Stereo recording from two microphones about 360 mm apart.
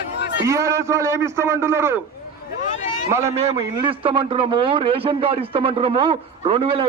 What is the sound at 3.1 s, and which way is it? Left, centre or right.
A man's voice, centre.